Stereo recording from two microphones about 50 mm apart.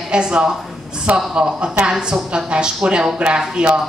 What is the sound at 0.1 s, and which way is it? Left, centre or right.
Speech, centre.